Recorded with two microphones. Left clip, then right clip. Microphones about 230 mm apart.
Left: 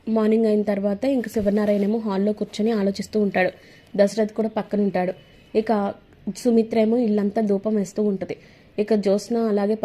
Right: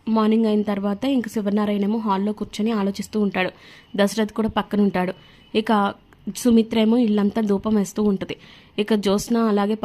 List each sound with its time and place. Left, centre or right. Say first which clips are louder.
0.0 s a woman's voice: even; centre